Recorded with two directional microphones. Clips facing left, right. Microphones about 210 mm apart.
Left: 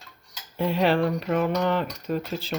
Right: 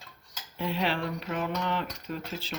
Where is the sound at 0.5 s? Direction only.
50° left (ahead or behind).